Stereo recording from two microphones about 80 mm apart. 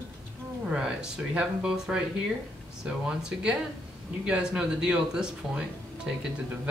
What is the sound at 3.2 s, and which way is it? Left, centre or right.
Speech, centre.